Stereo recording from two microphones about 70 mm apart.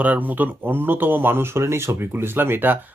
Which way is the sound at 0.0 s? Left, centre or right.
Right.